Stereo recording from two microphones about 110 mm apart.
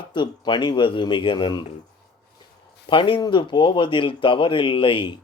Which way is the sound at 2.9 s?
50° left (ahead or behind).